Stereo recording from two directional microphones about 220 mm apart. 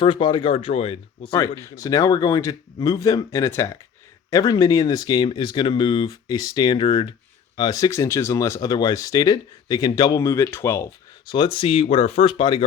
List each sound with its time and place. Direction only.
0.0 s speech: 20° left (ahead or behind)
11.3 s speech: 20° left (ahead or behind)